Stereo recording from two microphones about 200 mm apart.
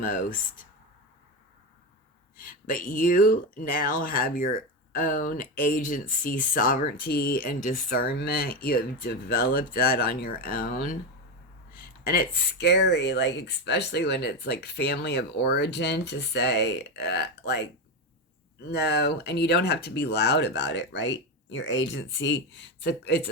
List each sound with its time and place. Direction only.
0.0 s speech: 45° left (ahead or behind)
2.4 s speech: 45° left (ahead or behind)